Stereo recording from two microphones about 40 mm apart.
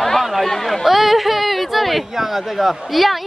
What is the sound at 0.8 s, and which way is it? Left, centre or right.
Speech, centre.